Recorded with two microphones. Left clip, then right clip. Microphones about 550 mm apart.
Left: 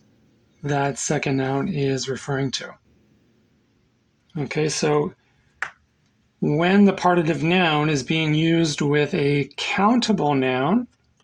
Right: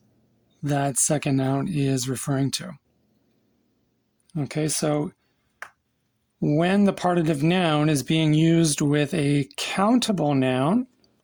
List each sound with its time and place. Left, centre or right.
0.6 s speech: right
4.4 s speech: right
6.4 s speech: right